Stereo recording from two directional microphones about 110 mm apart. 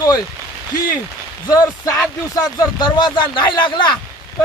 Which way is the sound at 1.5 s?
30° left (ahead or behind).